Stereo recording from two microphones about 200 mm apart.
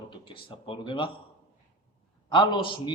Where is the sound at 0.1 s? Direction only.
25° left (ahead or behind).